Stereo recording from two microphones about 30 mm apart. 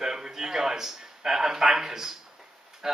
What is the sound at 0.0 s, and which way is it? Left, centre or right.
A man's voice, centre.